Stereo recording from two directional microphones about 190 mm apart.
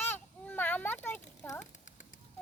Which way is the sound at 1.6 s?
40° left (ahead or behind).